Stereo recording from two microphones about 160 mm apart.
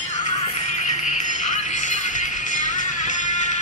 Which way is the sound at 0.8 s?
50° left (ahead or behind).